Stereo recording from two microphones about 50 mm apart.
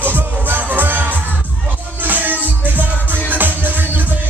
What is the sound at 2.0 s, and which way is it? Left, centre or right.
Music, right.